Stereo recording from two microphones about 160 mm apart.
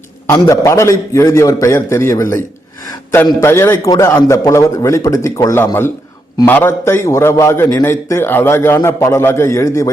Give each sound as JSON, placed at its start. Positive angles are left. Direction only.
{"t": 0.3, "sound": "a man's voice", "side_deg": 20}
{"t": 3.4, "sound": "a man's voice", "side_deg": 15}